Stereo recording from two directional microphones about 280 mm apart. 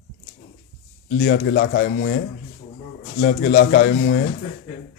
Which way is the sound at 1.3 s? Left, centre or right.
Left.